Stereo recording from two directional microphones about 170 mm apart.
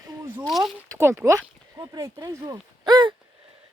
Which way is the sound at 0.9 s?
15° right (ahead or behind).